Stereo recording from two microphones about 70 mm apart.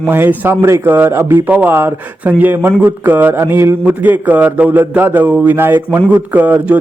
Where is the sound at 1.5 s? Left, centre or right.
Right.